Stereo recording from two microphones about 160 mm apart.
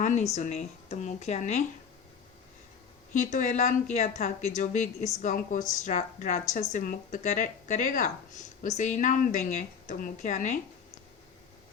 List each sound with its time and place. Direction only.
0.0 s speech: 50° left (ahead or behind)
3.3 s speech: 50° left (ahead or behind)